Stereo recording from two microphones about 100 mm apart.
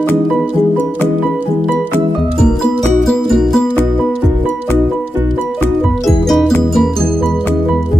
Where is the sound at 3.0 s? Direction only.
Centre (ahead or behind).